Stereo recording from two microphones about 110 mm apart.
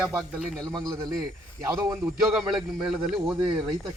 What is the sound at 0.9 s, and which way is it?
Speech, 35° right (ahead or behind).